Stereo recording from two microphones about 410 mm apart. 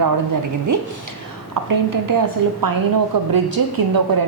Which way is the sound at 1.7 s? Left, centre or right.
Right.